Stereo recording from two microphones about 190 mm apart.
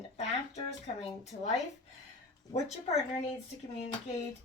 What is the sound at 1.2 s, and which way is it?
Speech, 35° left (ahead or behind).